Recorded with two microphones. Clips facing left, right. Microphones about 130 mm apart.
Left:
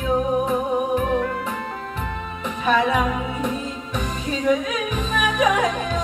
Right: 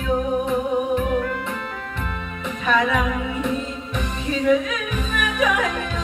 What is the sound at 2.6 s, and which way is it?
Music, 35° left (ahead or behind).